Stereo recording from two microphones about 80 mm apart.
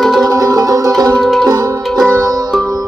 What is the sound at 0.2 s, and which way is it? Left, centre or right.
Music, right.